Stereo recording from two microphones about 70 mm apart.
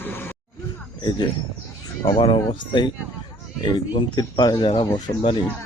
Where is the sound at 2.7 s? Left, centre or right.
Left.